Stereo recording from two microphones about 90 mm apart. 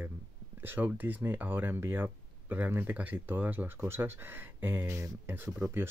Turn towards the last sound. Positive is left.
turn(degrees=-25)  # may be behind; listen again after turning